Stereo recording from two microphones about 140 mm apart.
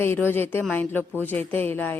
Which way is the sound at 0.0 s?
15° left (ahead or behind).